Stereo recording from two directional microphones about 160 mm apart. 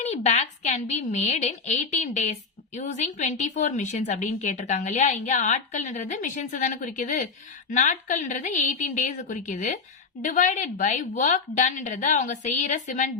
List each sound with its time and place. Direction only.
0.0 s a woman's voice: 45° left (ahead or behind)